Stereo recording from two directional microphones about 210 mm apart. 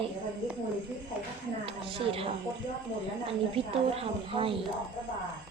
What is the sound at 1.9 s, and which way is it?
Speech, 25° right (ahead or behind).